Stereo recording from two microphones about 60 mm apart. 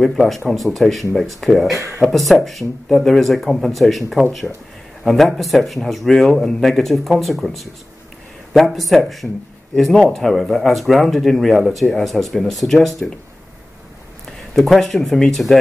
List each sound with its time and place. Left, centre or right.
0.0 s speech: centre
1.7 s speech: right
2.0 s speech: centre
14.2 s speech: centre